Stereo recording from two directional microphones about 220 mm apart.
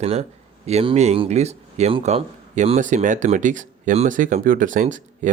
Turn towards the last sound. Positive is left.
turn(degrees=-35)  # may be behind; listen again after turning